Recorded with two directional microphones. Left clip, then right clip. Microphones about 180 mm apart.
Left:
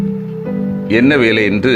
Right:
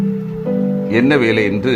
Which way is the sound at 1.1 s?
15° left (ahead or behind).